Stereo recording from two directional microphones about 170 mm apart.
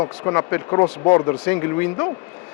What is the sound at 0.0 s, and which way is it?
Speech, 20° left (ahead or behind).